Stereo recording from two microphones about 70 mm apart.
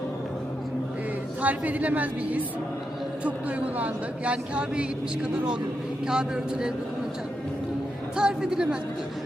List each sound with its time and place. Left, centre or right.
1.4 s a woman's voice: right
8.1 s speech: centre